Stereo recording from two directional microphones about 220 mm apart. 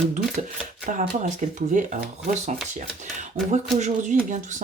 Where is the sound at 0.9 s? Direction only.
35° right (ahead or behind).